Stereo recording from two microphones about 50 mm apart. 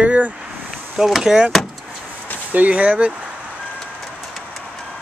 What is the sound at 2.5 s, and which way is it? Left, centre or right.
Speech, right.